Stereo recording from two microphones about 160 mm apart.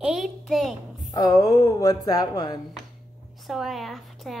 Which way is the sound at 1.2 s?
20° left (ahead or behind).